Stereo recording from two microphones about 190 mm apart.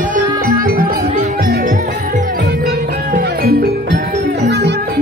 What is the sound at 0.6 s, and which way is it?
Music, 50° right (ahead or behind).